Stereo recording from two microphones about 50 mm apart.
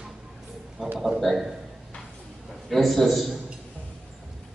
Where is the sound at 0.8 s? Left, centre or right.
Centre.